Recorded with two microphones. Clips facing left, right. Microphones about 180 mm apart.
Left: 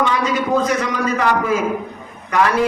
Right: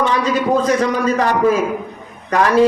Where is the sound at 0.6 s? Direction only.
35° right (ahead or behind).